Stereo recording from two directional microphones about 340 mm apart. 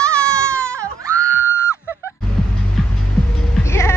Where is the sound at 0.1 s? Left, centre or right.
Centre.